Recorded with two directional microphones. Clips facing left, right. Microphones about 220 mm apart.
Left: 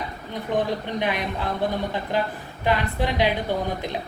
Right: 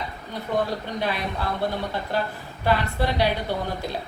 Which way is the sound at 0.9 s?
15° left (ahead or behind).